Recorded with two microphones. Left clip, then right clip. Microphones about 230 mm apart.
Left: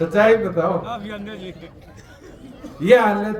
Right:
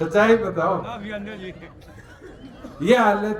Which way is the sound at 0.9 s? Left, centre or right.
Left.